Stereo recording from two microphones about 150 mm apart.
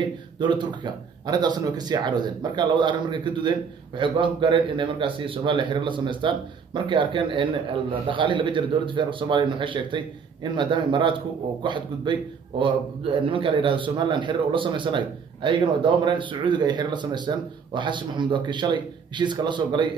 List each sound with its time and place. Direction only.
0.0 s speech: 30° right (ahead or behind)